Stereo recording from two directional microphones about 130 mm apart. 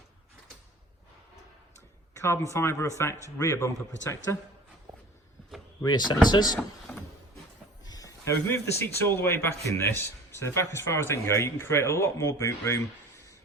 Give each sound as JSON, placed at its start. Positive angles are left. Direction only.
{"t": 2.1, "sound": "speech", "side_deg": 20}
{"t": 5.8, "sound": "speech", "side_deg": 30}
{"t": 7.9, "sound": "a sound", "side_deg": 30}
{"t": 9.0, "sound": "speech", "side_deg": 15}